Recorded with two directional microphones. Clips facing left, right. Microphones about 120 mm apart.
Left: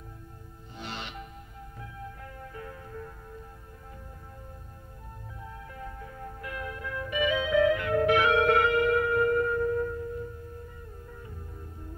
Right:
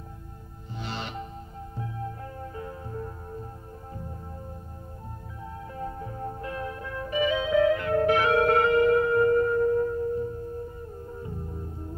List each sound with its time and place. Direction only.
0.8 s music: 35° right (ahead or behind)
5.7 s music: 30° right (ahead or behind)